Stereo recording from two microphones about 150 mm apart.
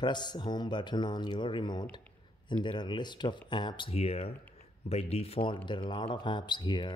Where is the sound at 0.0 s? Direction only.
30° left (ahead or behind).